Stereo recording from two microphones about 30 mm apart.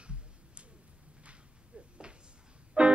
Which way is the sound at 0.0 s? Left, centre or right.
Right.